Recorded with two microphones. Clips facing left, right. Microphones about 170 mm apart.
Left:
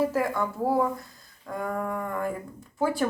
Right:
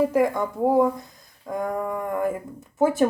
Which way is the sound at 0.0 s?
15° right (ahead or behind).